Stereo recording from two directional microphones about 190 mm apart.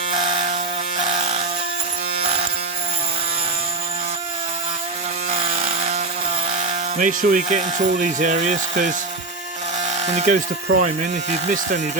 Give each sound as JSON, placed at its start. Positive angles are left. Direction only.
{"t": 0.2, "sound": "a sound", "side_deg": -25}
{"t": 6.5, "sound": "speech", "side_deg": -40}
{"t": 10.1, "sound": "speech", "side_deg": -40}